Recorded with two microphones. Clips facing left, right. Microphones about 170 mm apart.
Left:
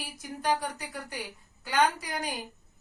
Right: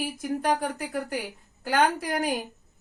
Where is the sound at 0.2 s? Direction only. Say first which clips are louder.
Right 3 dB; 50° right (ahead or behind).